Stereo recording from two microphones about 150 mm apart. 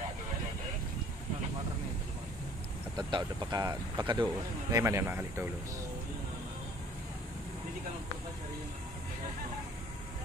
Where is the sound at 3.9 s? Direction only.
30° right (ahead or behind).